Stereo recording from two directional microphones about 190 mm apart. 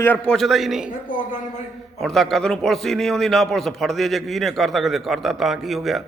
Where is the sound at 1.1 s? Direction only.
45° left (ahead or behind).